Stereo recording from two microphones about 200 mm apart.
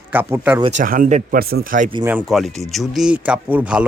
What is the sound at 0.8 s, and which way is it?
Speech, 40° right (ahead or behind).